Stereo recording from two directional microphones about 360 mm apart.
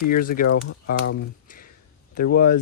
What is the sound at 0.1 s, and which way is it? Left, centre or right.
Speech, left.